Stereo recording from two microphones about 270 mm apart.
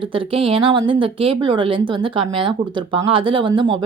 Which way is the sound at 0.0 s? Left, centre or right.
Centre.